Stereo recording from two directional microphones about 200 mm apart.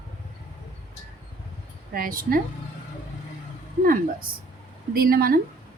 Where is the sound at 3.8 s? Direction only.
45° right (ahead or behind).